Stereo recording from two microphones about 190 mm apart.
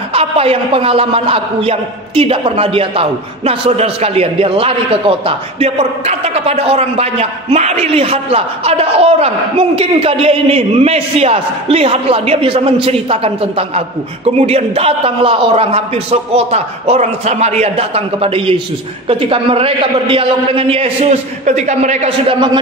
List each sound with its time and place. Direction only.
0.1 s a man's voice: 30° right (ahead or behind)